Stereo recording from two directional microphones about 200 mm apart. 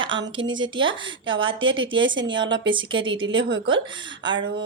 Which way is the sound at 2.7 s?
25° right (ahead or behind).